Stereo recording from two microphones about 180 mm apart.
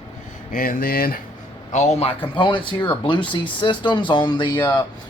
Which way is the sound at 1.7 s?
40° left (ahead or behind).